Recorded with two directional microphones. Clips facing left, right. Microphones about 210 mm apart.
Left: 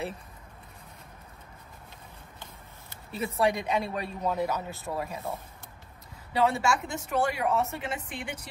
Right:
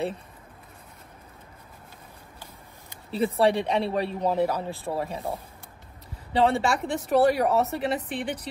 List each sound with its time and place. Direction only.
3.1 s a woman's voice: 30° right (ahead or behind)
6.3 s a woman's voice: 30° right (ahead or behind)